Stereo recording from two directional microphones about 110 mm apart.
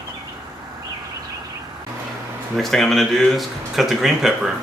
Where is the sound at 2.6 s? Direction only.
Centre (ahead or behind).